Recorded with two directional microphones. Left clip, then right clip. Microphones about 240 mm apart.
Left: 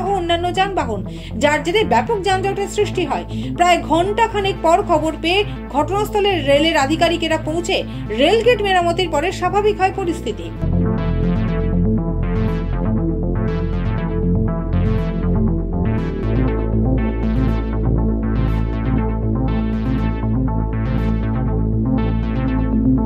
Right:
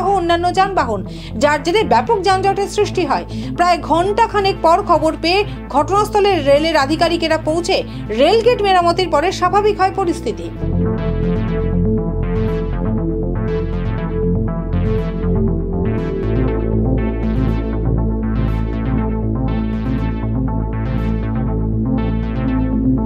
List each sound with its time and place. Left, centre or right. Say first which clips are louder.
0.0 s music: right 4 dB; centre
1.4 s speech: right 2 dB; centre
8.2 s speech: right 2 dB; centre
10.8 s music: right 2 dB; centre
16.9 s music: right 1 dB; centre
21.9 s music: even; centre